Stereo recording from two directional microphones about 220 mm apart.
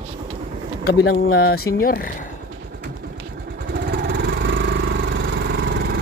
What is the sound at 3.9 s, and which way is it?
Vehicle, 50° right (ahead or behind).